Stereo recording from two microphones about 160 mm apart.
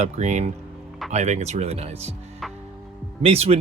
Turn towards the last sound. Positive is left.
turn(degrees=-40)  # may be behind; listen again after turning